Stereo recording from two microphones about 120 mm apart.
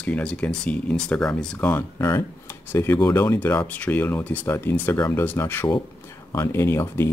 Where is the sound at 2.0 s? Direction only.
25° left (ahead or behind).